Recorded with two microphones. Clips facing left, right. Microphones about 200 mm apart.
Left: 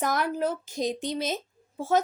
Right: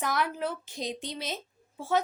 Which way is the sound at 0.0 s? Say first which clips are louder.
Left 4 dB; 45° left (ahead or behind).